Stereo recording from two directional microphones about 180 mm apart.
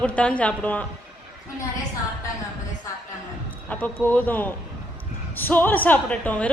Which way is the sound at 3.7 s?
10° left (ahead or behind).